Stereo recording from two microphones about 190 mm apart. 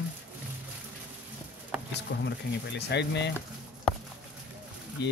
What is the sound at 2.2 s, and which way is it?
Speech, 65° left (ahead or behind).